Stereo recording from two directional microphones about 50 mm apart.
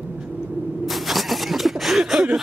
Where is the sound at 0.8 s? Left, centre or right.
Centre.